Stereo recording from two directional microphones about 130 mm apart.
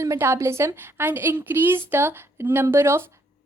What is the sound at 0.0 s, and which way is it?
A woman's voice, 20° right (ahead or behind).